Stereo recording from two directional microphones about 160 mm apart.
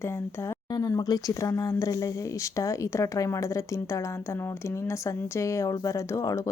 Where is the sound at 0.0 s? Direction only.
15° left (ahead or behind).